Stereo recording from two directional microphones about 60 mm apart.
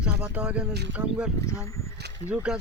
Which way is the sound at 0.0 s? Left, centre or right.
Centre.